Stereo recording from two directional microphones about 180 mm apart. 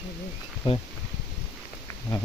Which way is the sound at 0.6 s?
30° left (ahead or behind).